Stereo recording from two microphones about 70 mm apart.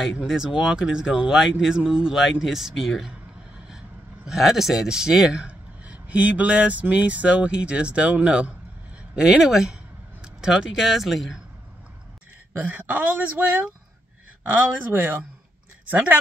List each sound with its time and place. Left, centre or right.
0.2 s speech: centre
12.5 s speech: right